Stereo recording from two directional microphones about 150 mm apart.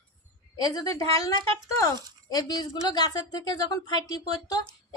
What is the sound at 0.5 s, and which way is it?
Speech, 25° left (ahead or behind).